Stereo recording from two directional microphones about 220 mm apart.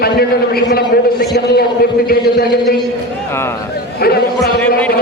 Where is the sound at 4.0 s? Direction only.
45° left (ahead or behind).